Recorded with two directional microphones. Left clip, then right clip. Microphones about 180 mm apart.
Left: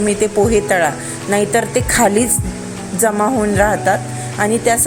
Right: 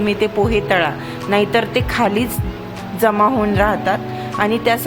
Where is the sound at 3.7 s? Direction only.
20° left (ahead or behind).